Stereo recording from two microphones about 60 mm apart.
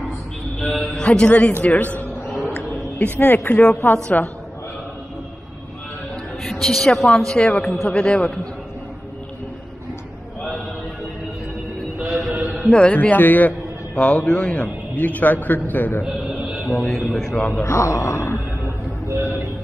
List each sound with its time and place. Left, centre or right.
0.6 s a man's voice: centre; by 2.0 s left
2.4 s a sound: left
3.8 s a woman's voice: left
6.4 s a man's voice: centre
12.0 s music: centre
12.9 s a man's voice: left
16.0 s mantra: centre
16.6 s a man's voice: centre
17.4 s a man's voice: left
17.6 s speech: left
18.1 s groan: left